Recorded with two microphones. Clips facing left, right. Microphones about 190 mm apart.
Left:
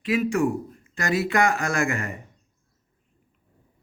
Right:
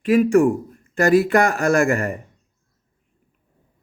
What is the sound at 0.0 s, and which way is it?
Speech, 50° right (ahead or behind).